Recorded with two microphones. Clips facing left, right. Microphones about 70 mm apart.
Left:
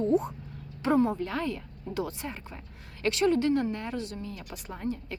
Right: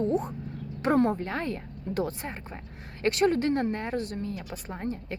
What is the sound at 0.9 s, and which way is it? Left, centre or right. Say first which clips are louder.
Speech: right 1 dB; right.